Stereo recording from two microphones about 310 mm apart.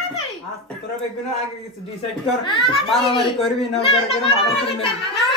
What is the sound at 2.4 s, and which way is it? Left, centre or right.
Speech, centre.